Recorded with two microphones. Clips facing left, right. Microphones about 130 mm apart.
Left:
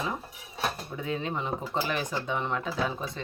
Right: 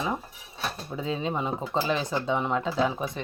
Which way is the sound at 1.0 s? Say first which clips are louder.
Right 3 dB; 20° right (ahead or behind).